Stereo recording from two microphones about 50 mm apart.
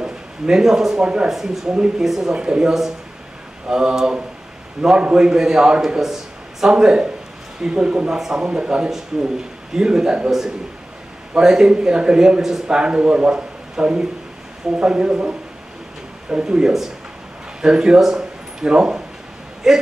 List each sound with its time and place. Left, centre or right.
0.0 s a man's voice: centre
1.3 s speech: centre
1.7 s a man's voice: centre
2.0 s a man's voice: centre
11.3 s a man's voice: centre